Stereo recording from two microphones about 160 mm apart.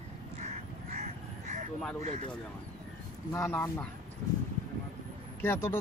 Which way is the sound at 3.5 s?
15° left (ahead or behind).